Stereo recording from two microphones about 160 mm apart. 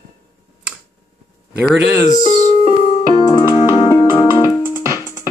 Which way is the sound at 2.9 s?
30° left (ahead or behind).